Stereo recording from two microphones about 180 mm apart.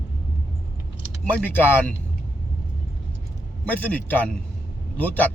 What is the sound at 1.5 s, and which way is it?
Speech, 10° left (ahead or behind).